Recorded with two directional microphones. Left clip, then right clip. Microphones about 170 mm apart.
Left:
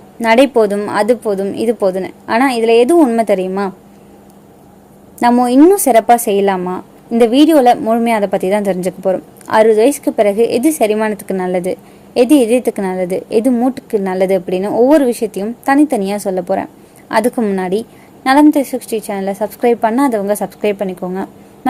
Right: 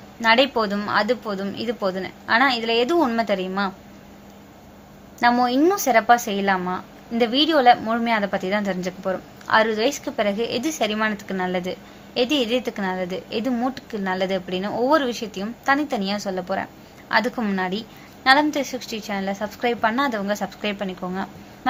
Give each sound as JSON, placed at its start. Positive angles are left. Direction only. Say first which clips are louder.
{"t": 0.2, "sound": "a woman's voice", "louder": "left 8 dB", "side_deg": 50}
{"t": 5.2, "sound": "a woman's voice", "louder": "left 9 dB", "side_deg": 50}
{"t": 14.7, "sound": "speech", "louder": "left 10 dB", "side_deg": 20}
{"t": 14.9, "sound": "a woman's voice", "louder": "left 9 dB", "side_deg": 50}
{"t": 21.1, "sound": "a sound", "louder": "left 7 dB", "side_deg": 45}